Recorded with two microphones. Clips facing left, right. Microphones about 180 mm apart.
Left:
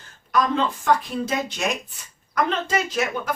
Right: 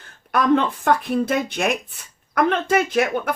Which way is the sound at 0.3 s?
60° right (ahead or behind).